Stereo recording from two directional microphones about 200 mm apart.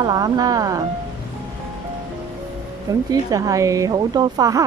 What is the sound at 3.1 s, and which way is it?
Speech, 15° right (ahead or behind).